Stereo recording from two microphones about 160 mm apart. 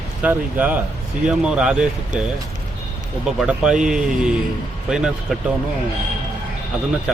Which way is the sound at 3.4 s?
5° right (ahead or behind).